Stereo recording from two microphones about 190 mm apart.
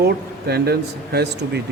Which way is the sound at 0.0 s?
55° right (ahead or behind).